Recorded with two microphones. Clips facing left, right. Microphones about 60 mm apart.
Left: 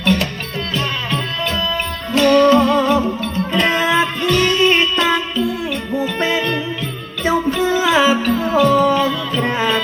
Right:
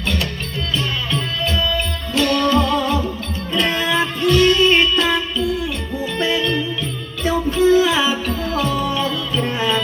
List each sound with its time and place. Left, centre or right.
0.0 s music: left
2.1 s music: left
6.1 s music: left
7.6 s music: left
7.9 s music: left
8.2 s music: left